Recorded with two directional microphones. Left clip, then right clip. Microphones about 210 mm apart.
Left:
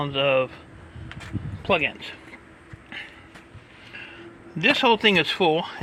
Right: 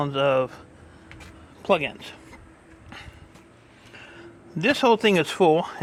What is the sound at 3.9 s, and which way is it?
Speech, 20° right (ahead or behind).